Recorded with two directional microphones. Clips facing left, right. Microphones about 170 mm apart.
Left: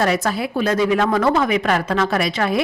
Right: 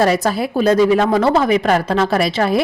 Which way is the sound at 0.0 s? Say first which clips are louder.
Right 4 dB; 35° right (ahead or behind).